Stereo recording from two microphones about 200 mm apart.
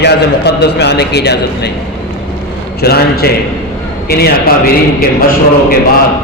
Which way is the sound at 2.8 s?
50° left (ahead or behind).